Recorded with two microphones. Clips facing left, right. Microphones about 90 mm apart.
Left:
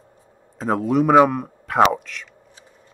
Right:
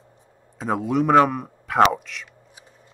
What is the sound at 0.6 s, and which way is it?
Speech, centre (ahead or behind).